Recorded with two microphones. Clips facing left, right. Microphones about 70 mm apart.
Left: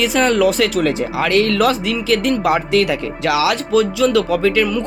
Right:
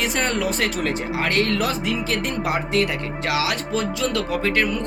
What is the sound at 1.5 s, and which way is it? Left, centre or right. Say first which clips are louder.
Speech: left 7 dB; left.